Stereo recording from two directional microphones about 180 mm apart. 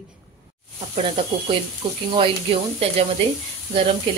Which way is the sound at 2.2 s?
30° right (ahead or behind).